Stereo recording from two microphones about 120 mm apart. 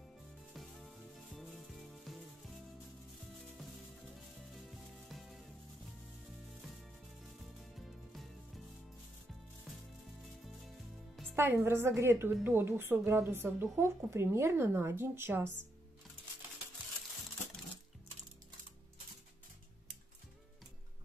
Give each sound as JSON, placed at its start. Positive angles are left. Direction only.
{"t": 0.6, "sound": "music", "side_deg": 0}
{"t": 5.0, "sound": "sizzle", "side_deg": 0}
{"t": 7.7, "sound": "music", "side_deg": 0}
{"t": 9.7, "sound": "music", "side_deg": 0}
{"t": 11.3, "sound": "a woman's voice", "side_deg": -20}